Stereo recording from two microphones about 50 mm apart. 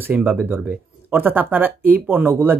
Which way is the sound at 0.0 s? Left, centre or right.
Right.